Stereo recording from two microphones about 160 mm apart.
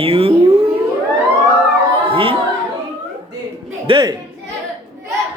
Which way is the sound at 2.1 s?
35° right (ahead or behind).